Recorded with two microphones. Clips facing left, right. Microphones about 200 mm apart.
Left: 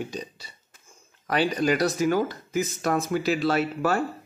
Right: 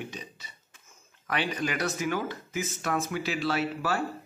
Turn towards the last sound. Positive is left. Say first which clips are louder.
# left 5 dB
turn(degrees=45)  # may be behind; listen again after turning